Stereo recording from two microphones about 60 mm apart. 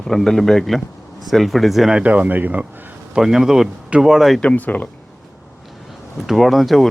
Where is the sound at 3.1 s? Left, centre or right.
Centre.